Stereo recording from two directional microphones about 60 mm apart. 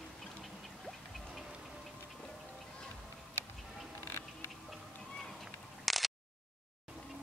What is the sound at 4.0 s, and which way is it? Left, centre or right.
Music, left.